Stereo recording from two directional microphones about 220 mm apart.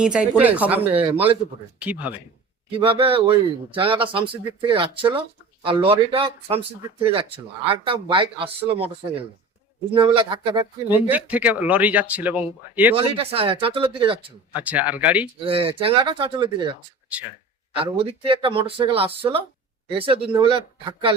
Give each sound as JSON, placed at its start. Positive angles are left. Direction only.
{"t": 0.0, "sound": "speech", "side_deg": -5}
{"t": 1.0, "sound": "speech", "side_deg": -25}
{"t": 1.8, "sound": "speech", "side_deg": -5}
{"t": 2.6, "sound": "speech", "side_deg": -25}
{"t": 10.8, "sound": "speech", "side_deg": -10}
{"t": 13.0, "sound": "speech", "side_deg": -25}
{"t": 14.5, "sound": "speech", "side_deg": -5}
{"t": 15.4, "sound": "speech", "side_deg": -25}
{"t": 17.7, "sound": "speech", "side_deg": -25}